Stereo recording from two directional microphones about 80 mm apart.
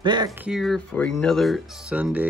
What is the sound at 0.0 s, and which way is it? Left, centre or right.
Speech, right.